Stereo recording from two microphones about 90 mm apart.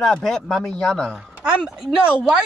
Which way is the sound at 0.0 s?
5° left (ahead or behind).